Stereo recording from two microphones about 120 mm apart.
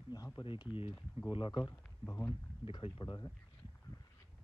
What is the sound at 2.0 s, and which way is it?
Speech, 20° left (ahead or behind).